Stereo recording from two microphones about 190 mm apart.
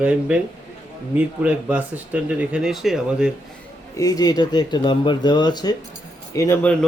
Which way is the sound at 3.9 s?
20° left (ahead or behind).